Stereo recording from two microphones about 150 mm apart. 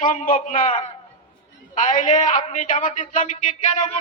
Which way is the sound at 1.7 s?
55° left (ahead or behind).